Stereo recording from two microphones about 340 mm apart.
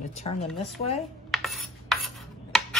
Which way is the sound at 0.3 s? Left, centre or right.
Centre.